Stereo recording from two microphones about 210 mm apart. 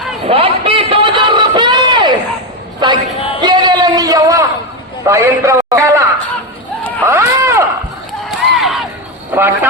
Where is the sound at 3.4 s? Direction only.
20° right (ahead or behind).